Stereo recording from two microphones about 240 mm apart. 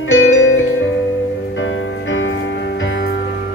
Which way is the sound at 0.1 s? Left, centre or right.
Left.